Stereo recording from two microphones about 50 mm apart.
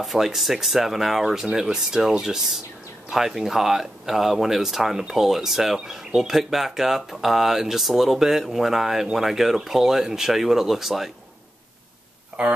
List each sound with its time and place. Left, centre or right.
0.0 s speech: centre
12.4 s speech: centre